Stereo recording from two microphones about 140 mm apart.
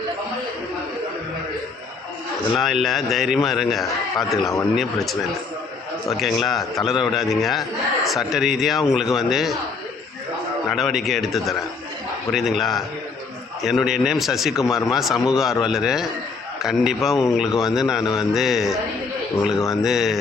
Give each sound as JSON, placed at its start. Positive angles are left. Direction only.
{"t": 2.6, "sound": "a man's voice", "side_deg": 0}
{"t": 6.1, "sound": "a man's voice", "side_deg": 0}
{"t": 10.7, "sound": "a man's voice", "side_deg": 0}
{"t": 14.7, "sound": "speech", "side_deg": 25}
{"t": 14.9, "sound": "a man's voice", "side_deg": 0}
{"t": 18.0, "sound": "speech", "side_deg": 30}
{"t": 18.3, "sound": "a man's voice", "side_deg": 0}